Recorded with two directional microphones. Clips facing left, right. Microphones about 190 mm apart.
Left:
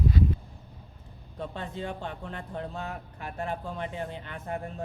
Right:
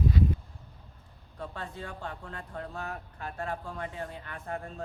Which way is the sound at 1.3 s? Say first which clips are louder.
Left 4 dB; 20° left (ahead or behind).